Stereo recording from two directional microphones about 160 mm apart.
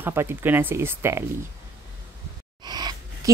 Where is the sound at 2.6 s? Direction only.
25° right (ahead or behind).